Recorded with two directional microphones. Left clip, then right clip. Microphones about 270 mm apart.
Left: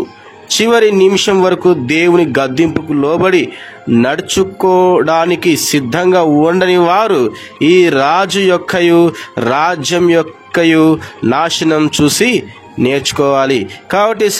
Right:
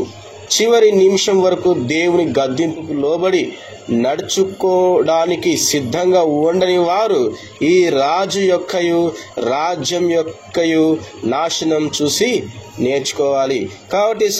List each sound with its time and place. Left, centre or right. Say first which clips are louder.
0.6 s speech: left 2 dB; left